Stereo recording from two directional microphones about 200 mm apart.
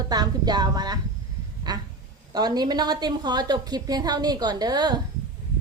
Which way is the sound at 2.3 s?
20° right (ahead or behind).